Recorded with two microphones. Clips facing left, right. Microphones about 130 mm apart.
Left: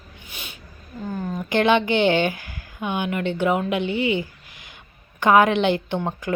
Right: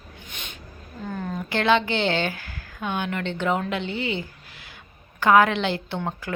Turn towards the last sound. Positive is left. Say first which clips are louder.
# left 4 dB
turn(degrees=15)  # may be behind; listen again after turning